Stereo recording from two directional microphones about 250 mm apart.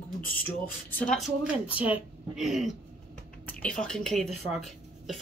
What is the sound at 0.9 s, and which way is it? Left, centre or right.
A woman's voice, centre.